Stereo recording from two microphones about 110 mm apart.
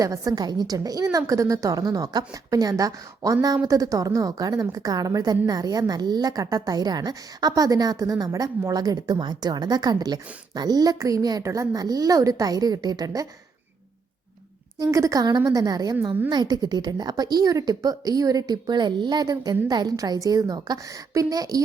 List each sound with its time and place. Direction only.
0.0 s a woman's voice: 35° right (ahead or behind)
14.8 s a woman's voice: 30° right (ahead or behind)